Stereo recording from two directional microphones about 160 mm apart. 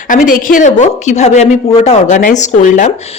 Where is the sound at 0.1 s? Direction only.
60° left (ahead or behind).